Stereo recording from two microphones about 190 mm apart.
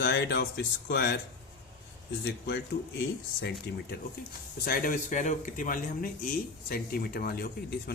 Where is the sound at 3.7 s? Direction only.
60° left (ahead or behind).